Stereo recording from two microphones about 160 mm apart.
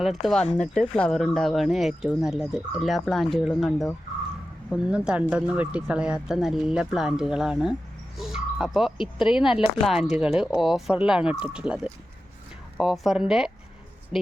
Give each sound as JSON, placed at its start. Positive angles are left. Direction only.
{"t": 0.0, "sound": "speech", "side_deg": 0}